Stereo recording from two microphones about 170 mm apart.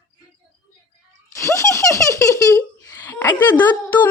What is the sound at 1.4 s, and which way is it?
Giggle, 20° left (ahead or behind).